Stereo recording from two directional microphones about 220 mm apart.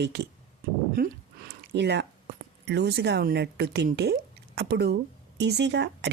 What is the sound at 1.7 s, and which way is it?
Speech, 50° right (ahead or behind).